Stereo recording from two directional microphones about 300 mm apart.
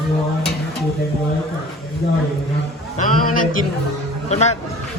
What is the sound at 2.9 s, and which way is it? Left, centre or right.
A man's voice, left.